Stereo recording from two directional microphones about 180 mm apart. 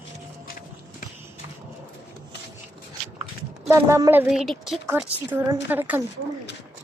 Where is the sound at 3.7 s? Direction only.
15° right (ahead or behind).